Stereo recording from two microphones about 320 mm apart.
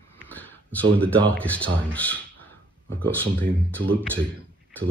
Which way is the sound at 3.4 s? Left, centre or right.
Centre.